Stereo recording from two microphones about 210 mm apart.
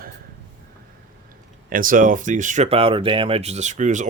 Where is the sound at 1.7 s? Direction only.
40° right (ahead or behind).